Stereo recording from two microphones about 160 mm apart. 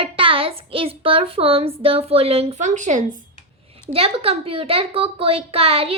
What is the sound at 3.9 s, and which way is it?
A child's voice, 35° right (ahead or behind).